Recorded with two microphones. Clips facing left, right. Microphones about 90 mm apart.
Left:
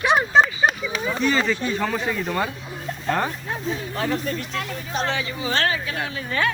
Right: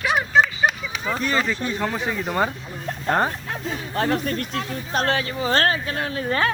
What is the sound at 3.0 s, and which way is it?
Speech, 40° right (ahead or behind).